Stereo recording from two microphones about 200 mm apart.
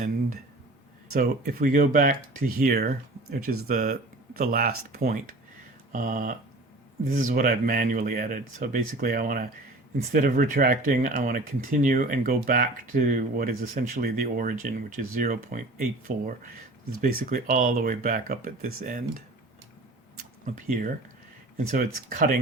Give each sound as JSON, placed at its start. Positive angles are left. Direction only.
{"t": 1.1, "sound": "speech", "side_deg": -45}
{"t": 20.4, "sound": "speech", "side_deg": -40}